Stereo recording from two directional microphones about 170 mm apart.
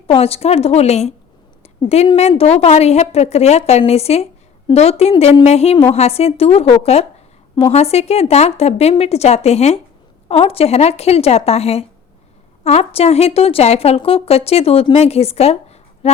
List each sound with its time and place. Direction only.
0.1 s speech: 35° left (ahead or behind)
1.6 s a sound: 40° left (ahead or behind)
2.0 s speech: 30° left (ahead or behind)